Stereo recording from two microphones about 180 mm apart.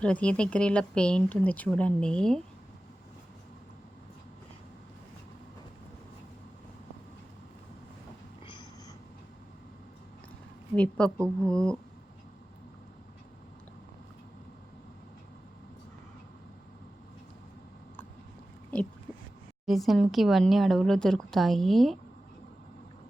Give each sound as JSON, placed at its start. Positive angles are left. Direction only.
{"t": 0.0, "sound": "speech", "side_deg": 5}
{"t": 10.8, "sound": "a woman's voice", "side_deg": 5}
{"t": 11.2, "sound": "speech", "side_deg": -15}
{"t": 19.6, "sound": "speech", "side_deg": 0}